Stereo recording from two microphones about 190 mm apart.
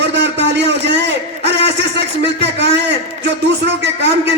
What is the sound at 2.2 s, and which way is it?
A man's voice, 65° right (ahead or behind).